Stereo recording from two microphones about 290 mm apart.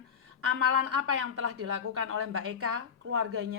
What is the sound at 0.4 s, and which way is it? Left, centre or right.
A woman's voice, right.